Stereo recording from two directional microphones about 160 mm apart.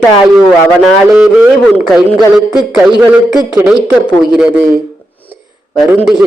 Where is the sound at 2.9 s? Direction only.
Centre (ahead or behind).